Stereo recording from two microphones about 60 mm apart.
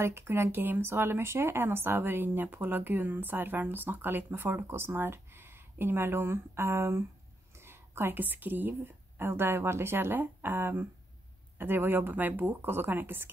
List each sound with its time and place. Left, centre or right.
0.0 s a woman's voice: right